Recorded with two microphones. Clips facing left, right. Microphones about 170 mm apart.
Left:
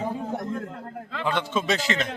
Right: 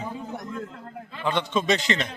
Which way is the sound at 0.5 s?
55° left (ahead or behind).